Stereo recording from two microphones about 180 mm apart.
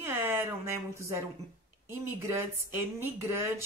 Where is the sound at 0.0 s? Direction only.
15° right (ahead or behind).